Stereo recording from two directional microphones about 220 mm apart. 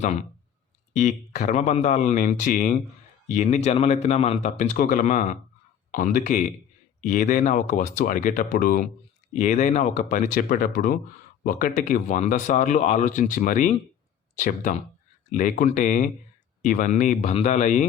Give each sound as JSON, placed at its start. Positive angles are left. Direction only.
{"t": 0.0, "sound": "speech", "side_deg": 30}